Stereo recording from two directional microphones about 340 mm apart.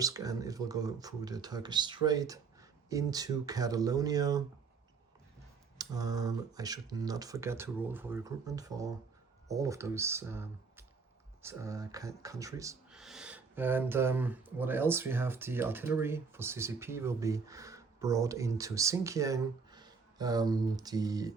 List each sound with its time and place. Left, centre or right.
0.0 s speech: centre
5.7 s speech: centre